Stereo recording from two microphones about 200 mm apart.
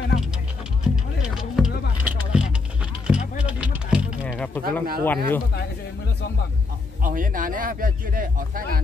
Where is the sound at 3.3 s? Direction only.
5° right (ahead or behind).